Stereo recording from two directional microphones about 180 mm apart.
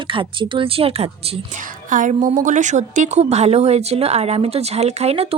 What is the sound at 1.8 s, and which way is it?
A woman's voice, 45° right (ahead or behind).